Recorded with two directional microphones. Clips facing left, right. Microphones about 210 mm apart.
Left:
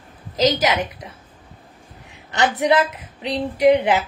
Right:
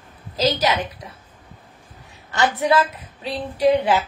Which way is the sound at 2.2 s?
20° left (ahead or behind).